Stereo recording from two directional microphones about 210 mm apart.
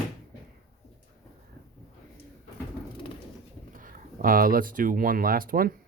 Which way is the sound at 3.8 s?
40° right (ahead or behind).